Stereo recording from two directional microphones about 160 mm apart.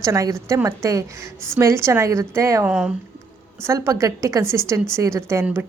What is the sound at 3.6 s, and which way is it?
A woman's voice, 20° right (ahead or behind).